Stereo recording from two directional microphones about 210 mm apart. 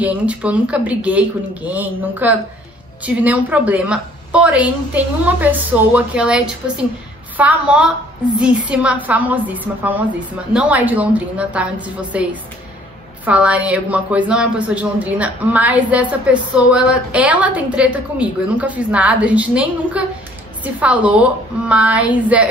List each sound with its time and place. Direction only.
0.0 s a woman's voice: 5° right (ahead or behind)